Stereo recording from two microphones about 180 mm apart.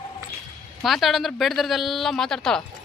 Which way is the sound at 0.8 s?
Centre (ahead or behind).